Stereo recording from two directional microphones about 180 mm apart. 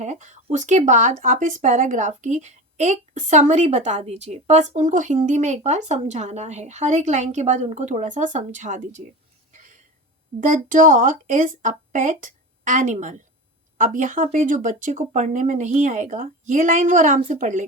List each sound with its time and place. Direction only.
0.0 s speech: 40° right (ahead or behind)
9.5 s a sound: 45° right (ahead or behind)
10.4 s speech: 45° right (ahead or behind)